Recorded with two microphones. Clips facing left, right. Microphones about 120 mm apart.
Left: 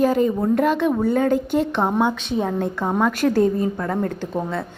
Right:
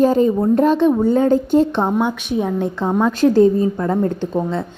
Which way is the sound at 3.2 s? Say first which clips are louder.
Right 8 dB; 25° right (ahead or behind).